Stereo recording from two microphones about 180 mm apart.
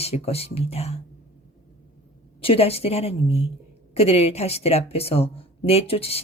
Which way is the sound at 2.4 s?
30° left (ahead or behind).